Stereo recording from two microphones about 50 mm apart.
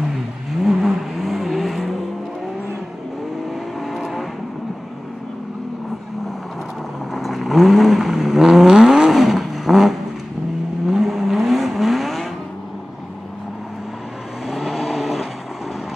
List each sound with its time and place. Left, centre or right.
0.5 s vehicle: centre
3.4 s vehicle: centre
7.2 s vehicle: centre
14.5 s vehicle: centre